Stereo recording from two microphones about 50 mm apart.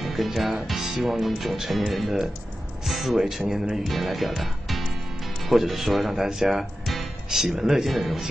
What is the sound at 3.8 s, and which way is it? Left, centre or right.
Speech, centre.